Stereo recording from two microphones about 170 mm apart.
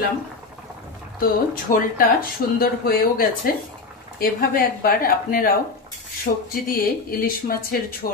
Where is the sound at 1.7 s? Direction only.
60° left (ahead or behind).